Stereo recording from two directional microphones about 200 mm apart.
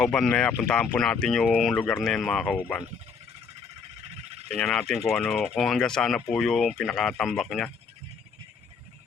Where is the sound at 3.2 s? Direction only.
30° right (ahead or behind).